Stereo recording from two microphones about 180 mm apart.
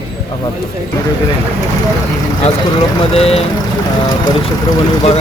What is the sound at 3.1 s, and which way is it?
Speech, 35° left (ahead or behind).